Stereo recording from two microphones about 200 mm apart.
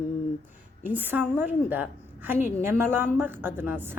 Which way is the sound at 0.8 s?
10° right (ahead or behind).